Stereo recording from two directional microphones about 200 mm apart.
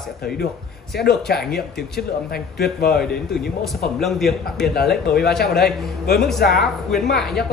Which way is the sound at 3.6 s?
Centre (ahead or behind).